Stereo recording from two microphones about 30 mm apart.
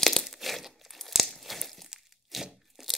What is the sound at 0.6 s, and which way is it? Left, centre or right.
Tearing, centre.